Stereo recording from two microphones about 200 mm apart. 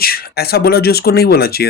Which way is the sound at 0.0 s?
50° left (ahead or behind).